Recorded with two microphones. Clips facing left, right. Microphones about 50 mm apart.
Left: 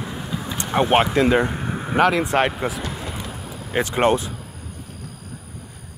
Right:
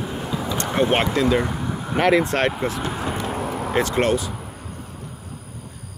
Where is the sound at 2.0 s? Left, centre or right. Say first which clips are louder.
Even; centre.